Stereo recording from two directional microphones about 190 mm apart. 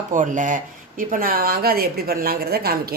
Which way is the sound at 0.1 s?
40° right (ahead or behind).